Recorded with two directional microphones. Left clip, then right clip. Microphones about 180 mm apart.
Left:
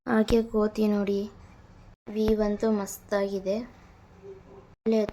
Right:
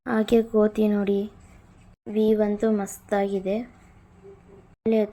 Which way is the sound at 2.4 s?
10° right (ahead or behind).